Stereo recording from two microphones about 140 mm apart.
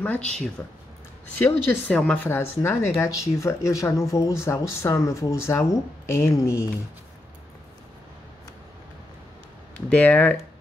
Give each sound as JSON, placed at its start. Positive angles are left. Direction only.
{"t": 0.6, "sound": "a woman's voice", "side_deg": 10}
{"t": 9.8, "sound": "speech", "side_deg": 10}